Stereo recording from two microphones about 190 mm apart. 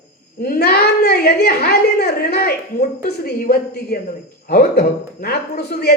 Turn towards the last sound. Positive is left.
turn(degrees=55)  # may be behind; listen again after turning